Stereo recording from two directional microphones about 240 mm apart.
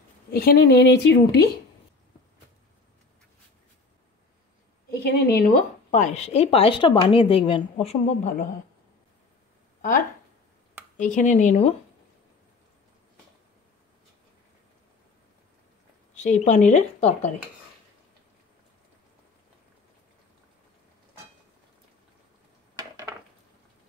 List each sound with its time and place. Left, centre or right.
0.3 s a woman's voice: left
5.0 s a woman's voice: left
9.8 s a sound: left
11.1 s a woman's voice: left
16.2 s a woman's voice: left
22.8 s a sound: centre